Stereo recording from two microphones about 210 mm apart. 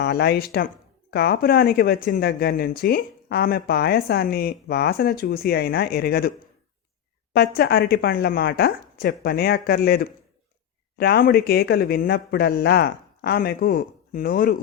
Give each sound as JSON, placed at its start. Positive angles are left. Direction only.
{"t": 0.0, "sound": "speech", "side_deg": 50}
{"t": 7.3, "sound": "speech", "side_deg": 50}